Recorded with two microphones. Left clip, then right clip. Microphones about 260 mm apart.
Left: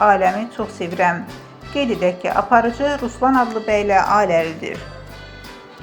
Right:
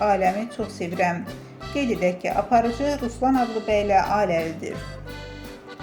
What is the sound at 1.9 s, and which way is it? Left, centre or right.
Speech, centre.